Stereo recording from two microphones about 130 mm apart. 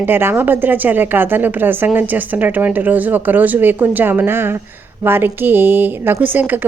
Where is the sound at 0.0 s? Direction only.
15° right (ahead or behind).